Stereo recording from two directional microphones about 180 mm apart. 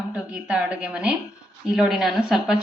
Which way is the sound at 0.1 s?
5° right (ahead or behind).